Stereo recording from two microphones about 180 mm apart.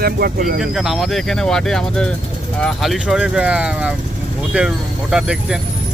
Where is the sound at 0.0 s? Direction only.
55° right (ahead or behind).